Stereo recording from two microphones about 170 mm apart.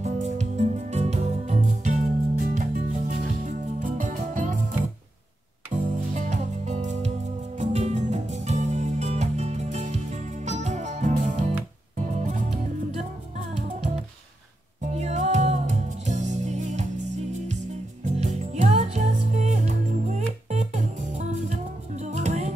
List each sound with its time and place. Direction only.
0.0 s music: 40° right (ahead or behind)
5.9 s music: 45° right (ahead or behind)
14.8 s music: 40° right (ahead or behind)